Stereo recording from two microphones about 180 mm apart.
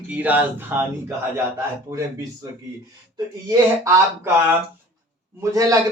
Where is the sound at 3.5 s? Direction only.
20° right (ahead or behind).